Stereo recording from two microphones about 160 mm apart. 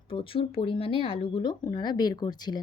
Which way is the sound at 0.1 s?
35° left (ahead or behind).